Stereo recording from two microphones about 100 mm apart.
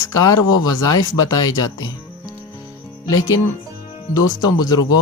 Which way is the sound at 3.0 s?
35° left (ahead or behind).